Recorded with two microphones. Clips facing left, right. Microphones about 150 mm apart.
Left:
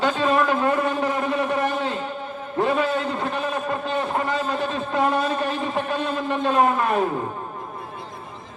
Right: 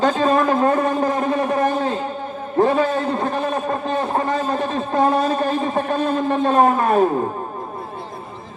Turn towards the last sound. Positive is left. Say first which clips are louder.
# right 5 dB
turn(degrees=-30)  # may be behind; listen again after turning